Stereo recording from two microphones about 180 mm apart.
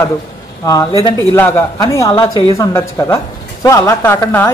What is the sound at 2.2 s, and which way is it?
A woman's voice, 30° left (ahead or behind).